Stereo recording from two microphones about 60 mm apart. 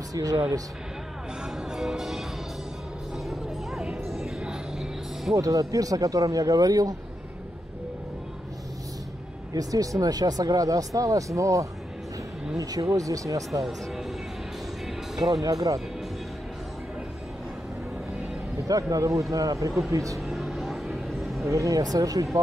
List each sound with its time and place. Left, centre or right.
0.1 s speech: right
1.4 s music: centre
4.1 s music: centre
5.3 s speech: right
9.5 s speech: right
12.5 s speech: right
13.5 s speech: centre
15.4 s speech: right
18.7 s speech: right
20.2 s vehicle: centre
21.5 s speech: right